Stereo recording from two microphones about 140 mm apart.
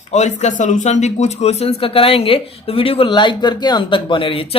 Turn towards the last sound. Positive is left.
turn(degrees=40)  # may be behind; listen again after turning